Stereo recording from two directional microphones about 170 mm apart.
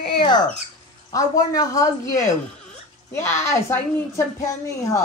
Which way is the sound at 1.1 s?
20° left (ahead or behind).